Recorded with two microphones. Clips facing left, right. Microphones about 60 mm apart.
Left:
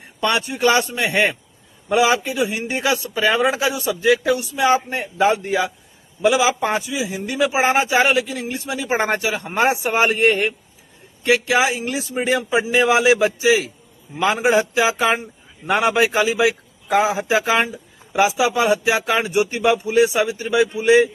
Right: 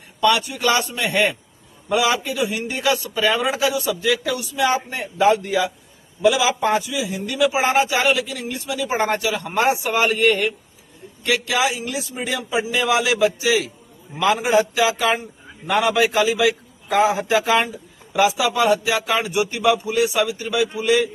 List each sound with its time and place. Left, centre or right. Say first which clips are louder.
0.2 s a man's voice: right 1 dB; left
9.5 s a man's voice: left 1 dB; left
16.9 s a man's voice: even; centre; by 21.1 s left